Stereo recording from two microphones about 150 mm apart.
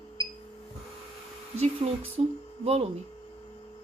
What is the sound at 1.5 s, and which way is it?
A woman's voice, 45° right (ahead or behind).